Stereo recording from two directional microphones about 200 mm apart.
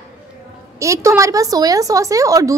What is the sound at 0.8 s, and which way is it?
A woman's voice, 15° right (ahead or behind).